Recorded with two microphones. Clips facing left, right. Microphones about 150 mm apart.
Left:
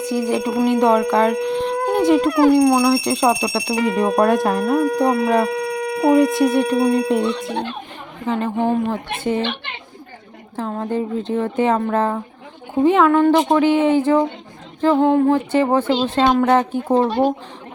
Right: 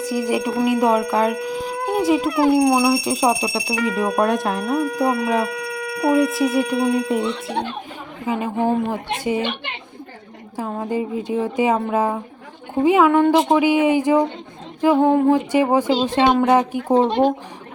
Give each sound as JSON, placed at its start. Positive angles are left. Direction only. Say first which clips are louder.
{"t": 0.1, "sound": "speech", "louder": "left 1 dB", "side_deg": -10}
{"t": 1.5, "sound": "dog", "louder": "left 5 dB", "side_deg": -5}
{"t": 2.0, "sound": "speech", "louder": "left 3 dB", "side_deg": -5}
{"t": 2.3, "sound": "speech", "louder": "left 3 dB", "side_deg": 50}
{"t": 2.6, "sound": "speech", "louder": "left 2 dB", "side_deg": -10}
{"t": 3.8, "sound": "speech", "louder": "left 3 dB", "side_deg": 25}
{"t": 4.2, "sound": "speech", "louder": "left 4 dB", "side_deg": 0}
{"t": 4.8, "sound": "speech", "louder": "left 3 dB", "side_deg": 35}
{"t": 5.5, "sound": "a sound", "louder": "left 5 dB", "side_deg": 30}
{"t": 6.6, "sound": "speech", "louder": "left 2 dB", "side_deg": 40}
{"t": 8.3, "sound": "speech", "louder": "left 1 dB", "side_deg": -10}
{"t": 10.6, "sound": "speech", "louder": "left 1 dB", "side_deg": -10}